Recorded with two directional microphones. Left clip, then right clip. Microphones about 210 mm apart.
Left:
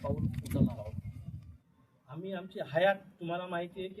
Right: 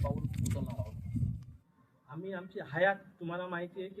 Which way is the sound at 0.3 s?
45° right (ahead or behind).